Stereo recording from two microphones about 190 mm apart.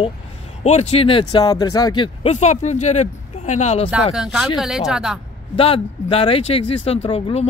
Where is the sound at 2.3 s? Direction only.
35° left (ahead or behind).